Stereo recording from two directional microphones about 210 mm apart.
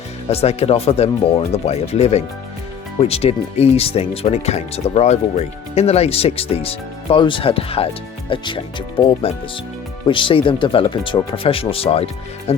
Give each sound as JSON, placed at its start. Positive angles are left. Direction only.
{"t": 0.3, "sound": "speech", "side_deg": 30}